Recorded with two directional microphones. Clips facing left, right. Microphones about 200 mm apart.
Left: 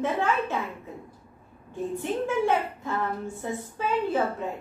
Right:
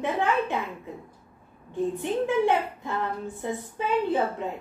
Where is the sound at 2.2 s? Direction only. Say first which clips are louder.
Right 2 dB; 15° right (ahead or behind).